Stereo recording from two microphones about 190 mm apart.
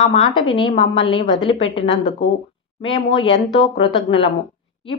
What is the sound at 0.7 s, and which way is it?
Speech, 30° left (ahead or behind).